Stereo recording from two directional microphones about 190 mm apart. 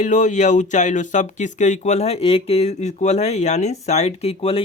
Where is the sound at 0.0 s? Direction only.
40° left (ahead or behind).